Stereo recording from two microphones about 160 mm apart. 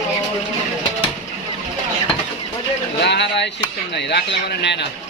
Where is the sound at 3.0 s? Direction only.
90° left.